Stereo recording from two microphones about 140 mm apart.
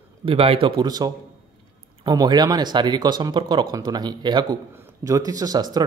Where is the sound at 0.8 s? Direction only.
30° right (ahead or behind).